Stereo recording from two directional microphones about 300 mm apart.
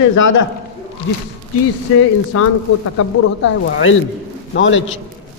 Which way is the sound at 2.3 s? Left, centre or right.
Left.